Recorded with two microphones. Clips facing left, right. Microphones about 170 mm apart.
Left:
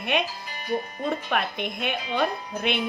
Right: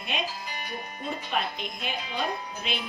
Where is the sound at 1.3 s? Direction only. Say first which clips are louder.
Left 4 dB; 60° left (ahead or behind).